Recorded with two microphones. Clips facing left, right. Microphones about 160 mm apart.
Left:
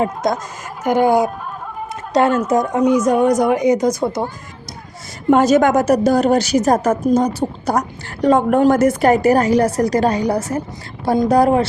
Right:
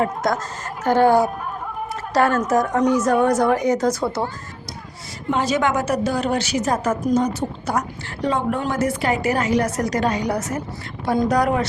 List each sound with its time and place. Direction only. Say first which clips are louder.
0.0 s speech: left 2 dB; 20° left (ahead or behind)
5.3 s a woman's voice: left 8 dB; 45° left (ahead or behind); by 11.6 s 30° left (ahead or behind)